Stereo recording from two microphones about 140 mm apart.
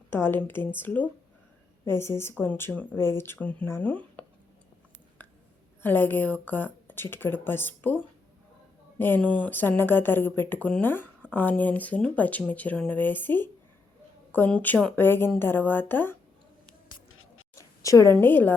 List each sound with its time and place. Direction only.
0.1 s a woman's voice: 15° left (ahead or behind)
5.8 s a woman's voice: 15° left (ahead or behind)
9.0 s a woman's voice: 15° left (ahead or behind)
17.8 s a woman's voice: 20° left (ahead or behind)